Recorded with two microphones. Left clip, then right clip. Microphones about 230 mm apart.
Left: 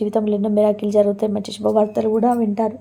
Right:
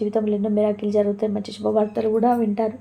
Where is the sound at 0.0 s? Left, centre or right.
Left.